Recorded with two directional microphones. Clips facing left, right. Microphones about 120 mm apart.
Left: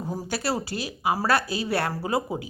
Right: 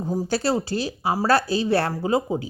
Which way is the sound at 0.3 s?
30° right (ahead or behind).